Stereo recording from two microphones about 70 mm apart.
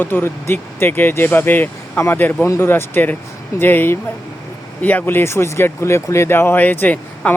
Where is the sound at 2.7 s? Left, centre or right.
Left.